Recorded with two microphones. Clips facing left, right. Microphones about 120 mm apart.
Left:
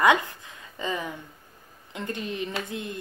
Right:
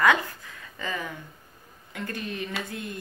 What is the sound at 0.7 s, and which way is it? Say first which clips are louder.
Speech: left 3 dB; 20° left (ahead or behind).